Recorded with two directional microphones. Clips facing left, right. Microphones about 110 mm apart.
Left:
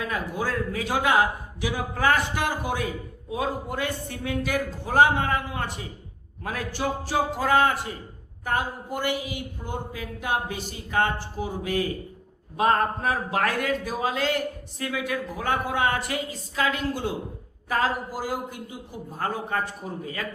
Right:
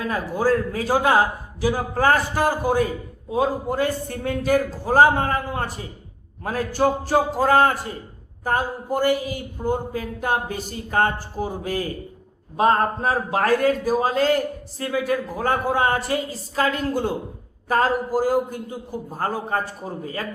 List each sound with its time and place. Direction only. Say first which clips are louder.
0.0 s a man's voice: right 6 dB; 40° right (ahead or behind)